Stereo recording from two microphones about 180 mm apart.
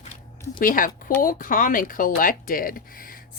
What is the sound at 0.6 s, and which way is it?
Speech, 50° left (ahead or behind).